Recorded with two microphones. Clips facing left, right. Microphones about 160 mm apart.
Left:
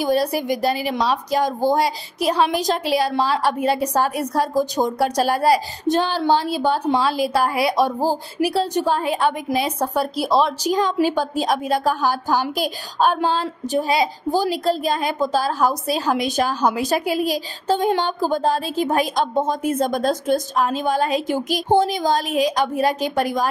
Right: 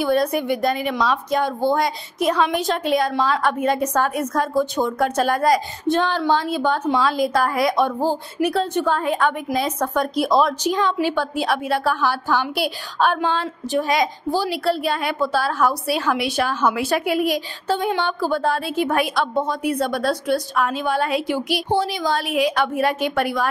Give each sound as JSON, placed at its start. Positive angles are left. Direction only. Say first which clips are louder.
{"t": 0.0, "sound": "a woman's voice", "louder": "even", "side_deg": 35}